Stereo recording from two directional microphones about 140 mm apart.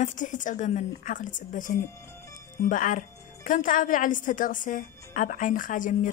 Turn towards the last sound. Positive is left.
turn(degrees=70)  # may be behind; listen again after turning